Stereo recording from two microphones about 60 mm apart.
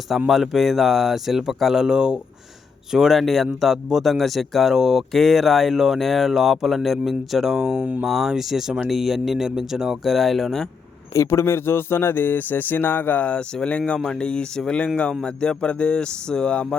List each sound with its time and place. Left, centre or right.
0.3 s speech: centre
11.1 s speech: left; by 16.6 s centre